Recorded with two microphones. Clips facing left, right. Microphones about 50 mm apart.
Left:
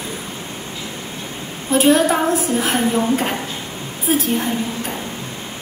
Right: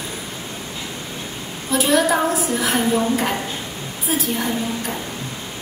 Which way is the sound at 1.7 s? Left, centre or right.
Left.